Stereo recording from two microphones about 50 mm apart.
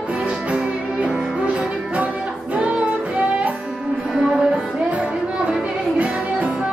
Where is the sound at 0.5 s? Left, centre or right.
Right.